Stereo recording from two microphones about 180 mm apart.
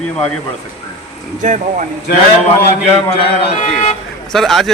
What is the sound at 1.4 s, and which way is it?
Speech, 45° right (ahead or behind).